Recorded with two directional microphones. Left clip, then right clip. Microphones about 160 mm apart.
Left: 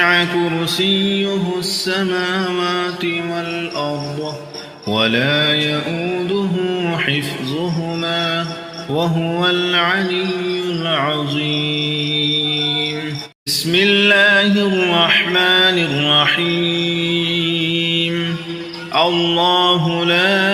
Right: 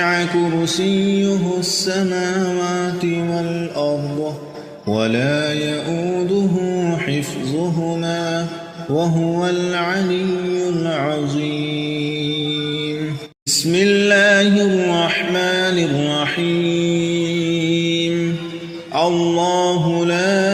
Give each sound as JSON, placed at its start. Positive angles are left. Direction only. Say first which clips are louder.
{"t": 0.0, "sound": "mantra", "louder": "left 3 dB", "side_deg": -40}
{"t": 4.9, "sound": "mantra", "louder": "left 3 dB", "side_deg": -40}
{"t": 6.8, "sound": "mantra", "louder": "left 3 dB", "side_deg": -30}
{"t": 8.0, "sound": "mantra", "louder": "left 6 dB", "side_deg": -55}
{"t": 9.0, "sound": "mantra", "louder": "left 1 dB", "side_deg": -35}
{"t": 13.5, "sound": "a sound", "louder": "left 1 dB", "side_deg": -45}
{"t": 14.8, "sound": "mantra", "louder": "left 4 dB", "side_deg": -45}
{"t": 18.9, "sound": "mantra", "louder": "left 2 dB", "side_deg": -45}